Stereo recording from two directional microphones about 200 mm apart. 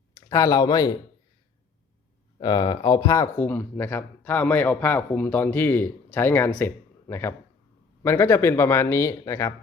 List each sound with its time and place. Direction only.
0.3 s speech: 15° left (ahead or behind)
2.4 s speech: 20° left (ahead or behind)